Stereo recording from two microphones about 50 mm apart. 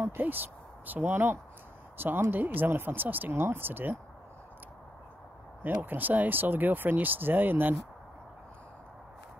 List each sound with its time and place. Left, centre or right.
0.2 s speech: right
5.6 s speech: right